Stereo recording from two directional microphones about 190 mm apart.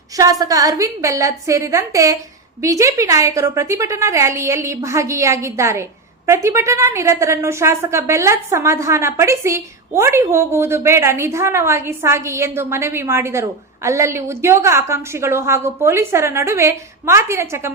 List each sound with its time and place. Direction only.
0.2 s a woman's voice: 20° right (ahead or behind)